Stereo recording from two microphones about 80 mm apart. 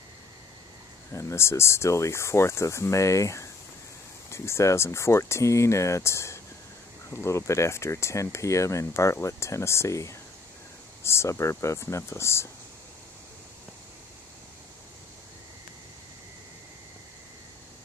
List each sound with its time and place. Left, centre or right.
1.1 s speech: left